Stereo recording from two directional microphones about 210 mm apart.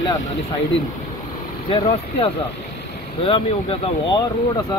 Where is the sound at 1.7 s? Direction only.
25° left (ahead or behind).